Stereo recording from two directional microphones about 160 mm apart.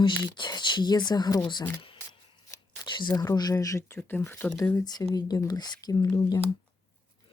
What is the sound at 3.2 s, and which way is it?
Speech, 25° left (ahead or behind).